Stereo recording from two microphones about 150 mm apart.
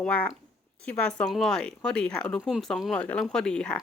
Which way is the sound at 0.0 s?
10° left (ahead or behind).